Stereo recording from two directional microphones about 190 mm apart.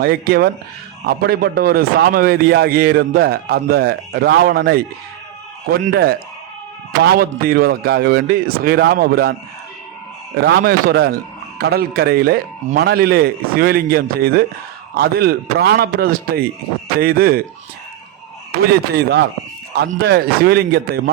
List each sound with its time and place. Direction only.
0.0 s a man's voice: 50° right (ahead or behind)
5.9 s a man's voice: 55° right (ahead or behind)
10.4 s a man's voice: 55° right (ahead or behind)
18.6 s a man's voice: 55° right (ahead or behind)